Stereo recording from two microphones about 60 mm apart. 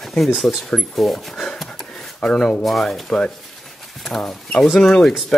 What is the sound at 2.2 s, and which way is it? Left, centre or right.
Speech, centre.